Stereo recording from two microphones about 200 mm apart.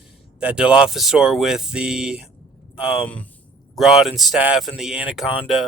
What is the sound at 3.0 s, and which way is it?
Speech, 5° left (ahead or behind).